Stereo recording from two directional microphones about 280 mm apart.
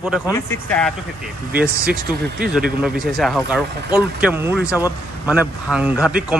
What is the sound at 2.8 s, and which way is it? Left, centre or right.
A man's voice, centre.